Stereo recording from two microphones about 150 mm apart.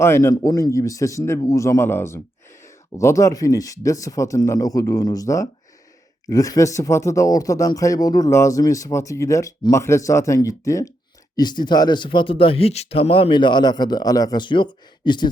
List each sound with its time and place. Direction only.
0.0 s speech: 15° left (ahead or behind)